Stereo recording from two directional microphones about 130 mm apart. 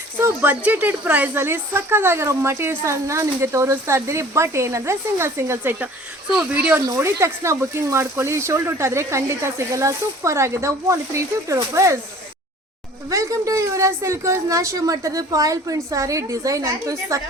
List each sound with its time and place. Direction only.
0.2 s speech: 15° right (ahead or behind)
13.1 s speech: 25° right (ahead or behind)